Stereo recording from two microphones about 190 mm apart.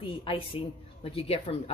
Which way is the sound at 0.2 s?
30° left (ahead or behind).